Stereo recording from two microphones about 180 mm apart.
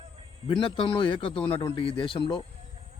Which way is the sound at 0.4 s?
30° left (ahead or behind).